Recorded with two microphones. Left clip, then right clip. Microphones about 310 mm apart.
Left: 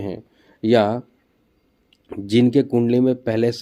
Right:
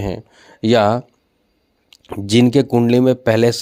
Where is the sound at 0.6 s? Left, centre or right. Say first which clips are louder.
Right 3 dB; right.